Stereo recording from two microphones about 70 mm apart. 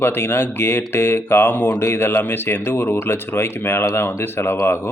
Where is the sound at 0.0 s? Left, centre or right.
Left.